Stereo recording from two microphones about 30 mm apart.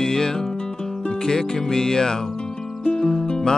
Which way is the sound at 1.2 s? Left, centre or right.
Centre.